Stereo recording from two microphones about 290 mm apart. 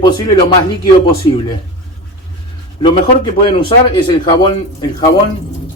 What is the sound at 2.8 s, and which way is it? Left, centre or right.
Speech, centre.